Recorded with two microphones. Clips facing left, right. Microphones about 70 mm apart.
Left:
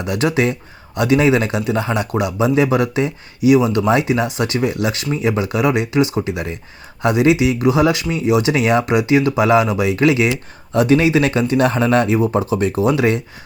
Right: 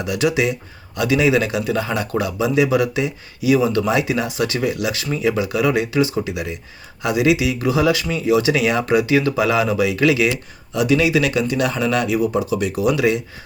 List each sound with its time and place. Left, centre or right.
0.0 s speech: left
3.5 s speech: left
10.7 s speech: left